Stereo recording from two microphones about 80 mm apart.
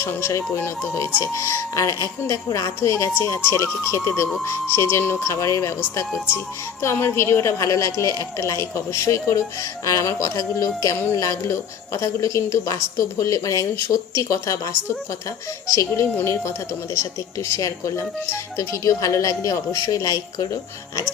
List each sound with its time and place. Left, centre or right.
0.0 s a woman's voice: left
6.8 s a woman's voice: left
17.5 s speech: left